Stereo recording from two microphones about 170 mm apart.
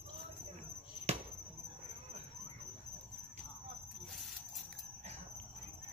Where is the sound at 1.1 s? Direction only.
40° right (ahead or behind).